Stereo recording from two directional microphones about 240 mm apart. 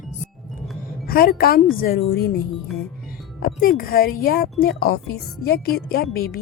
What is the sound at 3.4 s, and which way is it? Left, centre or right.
Speech, left.